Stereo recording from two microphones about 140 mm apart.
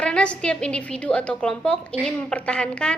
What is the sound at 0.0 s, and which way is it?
A woman's voice, 5° left (ahead or behind).